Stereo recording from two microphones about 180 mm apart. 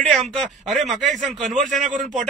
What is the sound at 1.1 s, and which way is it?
Speech, 40° right (ahead or behind).